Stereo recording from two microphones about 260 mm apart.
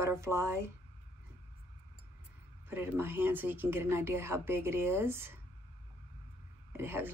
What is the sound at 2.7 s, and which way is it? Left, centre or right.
Speech, centre.